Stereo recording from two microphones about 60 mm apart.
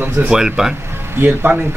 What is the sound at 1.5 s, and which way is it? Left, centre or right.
Speech, right.